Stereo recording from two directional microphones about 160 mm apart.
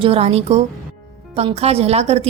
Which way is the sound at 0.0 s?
40° right (ahead or behind).